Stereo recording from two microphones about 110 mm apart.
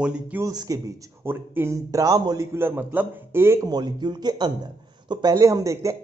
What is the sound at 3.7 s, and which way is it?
A man's voice, 40° right (ahead or behind).